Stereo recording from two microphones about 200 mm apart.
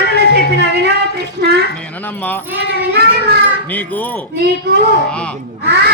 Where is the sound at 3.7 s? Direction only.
10° left (ahead or behind).